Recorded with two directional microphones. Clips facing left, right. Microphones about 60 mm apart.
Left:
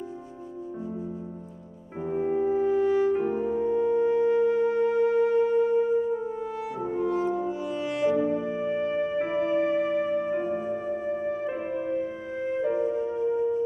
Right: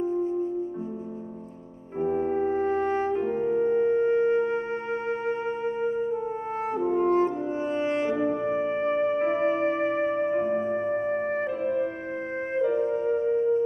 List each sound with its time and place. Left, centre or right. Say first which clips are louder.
2.0 s music: right 2 dB; right
2.3 s music: left 1 dB; right
6.8 s french horn: right 5 dB; right
7.8 s music: left 2 dB; right